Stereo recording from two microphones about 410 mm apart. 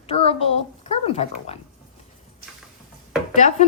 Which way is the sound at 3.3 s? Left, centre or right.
Centre.